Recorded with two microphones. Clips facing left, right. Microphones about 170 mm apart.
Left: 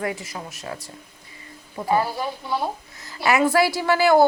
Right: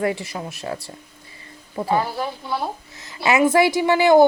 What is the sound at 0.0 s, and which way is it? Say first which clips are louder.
Speech: right 5 dB; 25° right (ahead or behind).